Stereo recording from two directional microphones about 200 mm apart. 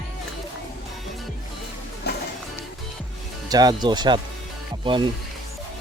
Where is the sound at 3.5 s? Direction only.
20° right (ahead or behind).